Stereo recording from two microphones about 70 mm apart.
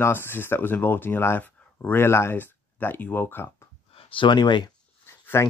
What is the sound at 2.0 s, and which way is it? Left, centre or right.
Speech, left.